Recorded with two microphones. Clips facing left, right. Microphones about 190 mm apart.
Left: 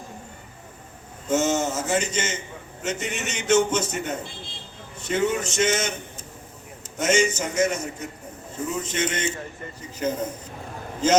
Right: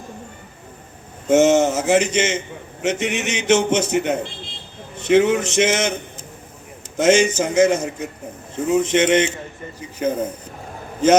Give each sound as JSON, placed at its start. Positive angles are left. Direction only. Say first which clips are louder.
{"t": 1.3, "sound": "a man's voice", "louder": "right 9 dB", "side_deg": -85}
{"t": 6.9, "sound": "a man's voice", "louder": "right 7 dB", "side_deg": -90}
{"t": 8.5, "sound": "a man's voice", "louder": "right 11 dB", "side_deg": -80}
{"t": 10.0, "sound": "speech", "louder": "right 5 dB", "side_deg": -55}